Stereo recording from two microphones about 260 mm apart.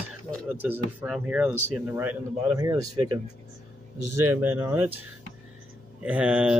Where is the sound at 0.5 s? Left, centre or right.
Centre.